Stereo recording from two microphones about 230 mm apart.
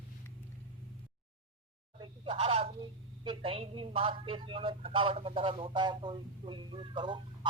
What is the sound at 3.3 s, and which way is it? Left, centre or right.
A woman's voice, right.